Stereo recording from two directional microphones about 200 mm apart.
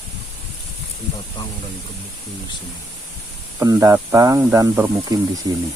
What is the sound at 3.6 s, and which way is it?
Speech, 15° right (ahead or behind).